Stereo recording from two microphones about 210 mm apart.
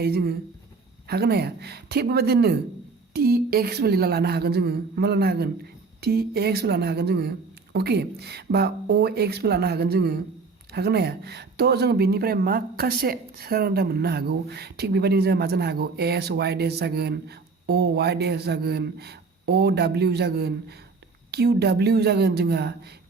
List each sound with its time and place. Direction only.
0.0 s speech: 50° right (ahead or behind)